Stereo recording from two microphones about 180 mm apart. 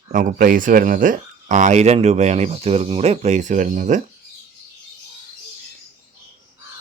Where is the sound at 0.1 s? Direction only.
45° right (ahead or behind).